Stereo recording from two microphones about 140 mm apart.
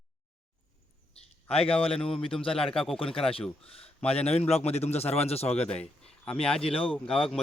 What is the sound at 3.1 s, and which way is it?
Speech, 5° left (ahead or behind).